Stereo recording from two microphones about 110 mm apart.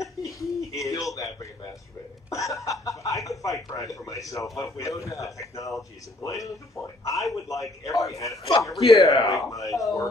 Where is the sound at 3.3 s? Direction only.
30° left (ahead or behind).